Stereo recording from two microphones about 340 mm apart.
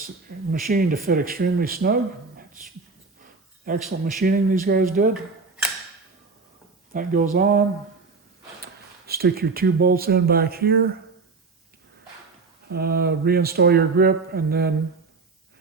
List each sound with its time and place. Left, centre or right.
0.0 s speech: right
3.2 s a sound: right
3.8 s speech: right
6.9 s speech: right
8.6 s speech: right
12.6 s speech: right